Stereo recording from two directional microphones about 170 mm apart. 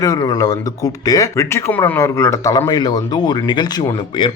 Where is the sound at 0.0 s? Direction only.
20° left (ahead or behind).